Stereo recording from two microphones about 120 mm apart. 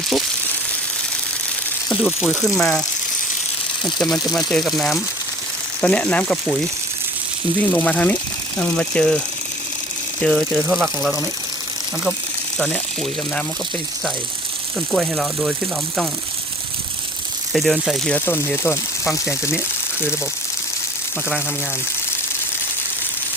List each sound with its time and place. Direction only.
2.2 s speech: centre (ahead or behind)
3.8 s speech: centre (ahead or behind)
5.8 s speech: 10° left (ahead or behind)
7.6 s speech: 15° left (ahead or behind)
12.5 s speech: 5° left (ahead or behind)
14.9 s speech: 5° right (ahead or behind)
17.5 s speech: centre (ahead or behind)
18.3 s speech: 20° left (ahead or behind)